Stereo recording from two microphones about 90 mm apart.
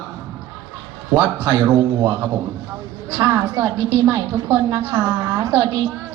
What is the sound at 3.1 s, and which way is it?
Speech, 25° right (ahead or behind).